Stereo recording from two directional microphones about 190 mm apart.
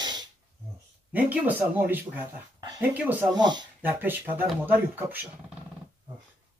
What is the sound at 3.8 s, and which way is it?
Speech, 10° right (ahead or behind).